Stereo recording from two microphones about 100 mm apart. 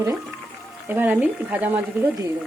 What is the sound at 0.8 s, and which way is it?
Speech, 20° right (ahead or behind).